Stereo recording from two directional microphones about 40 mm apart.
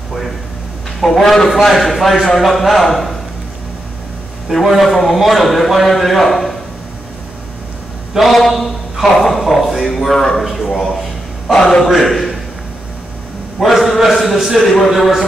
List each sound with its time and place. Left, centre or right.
1.0 s a man's voice: centre
4.5 s a man's voice: centre
8.3 s a man's voice: centre
11.5 s a man's voice: centre
11.8 s a man's voice: centre
13.6 s a man's voice: centre